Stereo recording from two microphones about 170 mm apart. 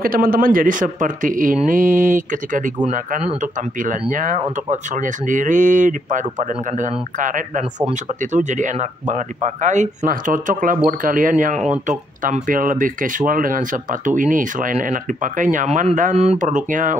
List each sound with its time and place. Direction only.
0.0 s speech: 60° right (ahead or behind)